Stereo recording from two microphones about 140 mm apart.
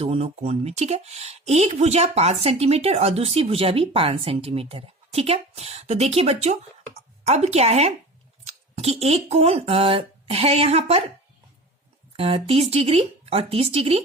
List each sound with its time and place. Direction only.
0.0 s speech: 45° right (ahead or behind)
12.1 s speech: 45° right (ahead or behind)